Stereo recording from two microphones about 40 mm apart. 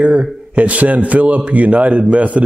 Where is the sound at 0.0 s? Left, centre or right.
Right.